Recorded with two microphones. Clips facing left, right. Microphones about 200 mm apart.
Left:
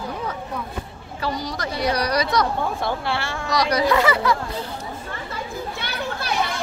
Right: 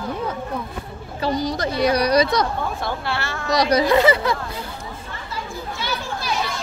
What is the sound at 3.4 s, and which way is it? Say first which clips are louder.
Speech: right 3 dB; 25° right (ahead or behind).